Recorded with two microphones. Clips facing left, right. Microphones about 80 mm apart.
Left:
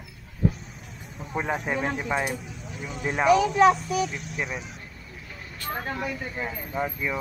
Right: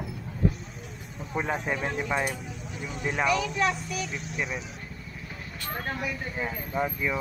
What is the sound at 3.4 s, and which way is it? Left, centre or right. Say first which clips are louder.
Speech: left 9 dB; left.